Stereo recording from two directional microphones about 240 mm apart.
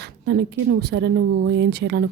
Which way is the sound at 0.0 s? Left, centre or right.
Right.